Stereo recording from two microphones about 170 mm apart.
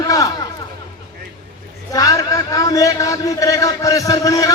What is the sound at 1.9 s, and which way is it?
A man's voice, 20° left (ahead or behind).